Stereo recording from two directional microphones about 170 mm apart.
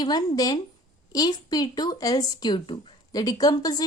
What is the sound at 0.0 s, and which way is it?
Speech, 25° left (ahead or behind).